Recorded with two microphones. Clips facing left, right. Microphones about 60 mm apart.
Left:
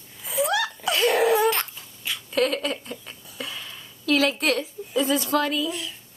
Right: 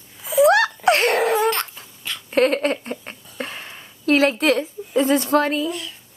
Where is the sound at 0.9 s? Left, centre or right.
Right.